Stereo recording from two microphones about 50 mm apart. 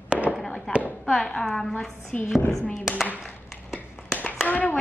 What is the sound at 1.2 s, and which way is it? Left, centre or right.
Speech, centre.